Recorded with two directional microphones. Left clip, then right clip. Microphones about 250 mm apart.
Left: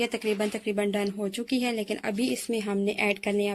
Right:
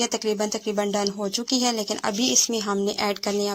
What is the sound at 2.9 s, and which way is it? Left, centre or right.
Speech, right.